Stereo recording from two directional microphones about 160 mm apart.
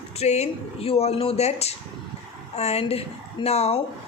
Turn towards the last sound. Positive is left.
turn(degrees=40)  # may be behind; listen again after turning